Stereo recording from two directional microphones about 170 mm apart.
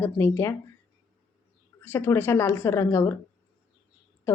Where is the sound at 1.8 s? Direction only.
15° left (ahead or behind).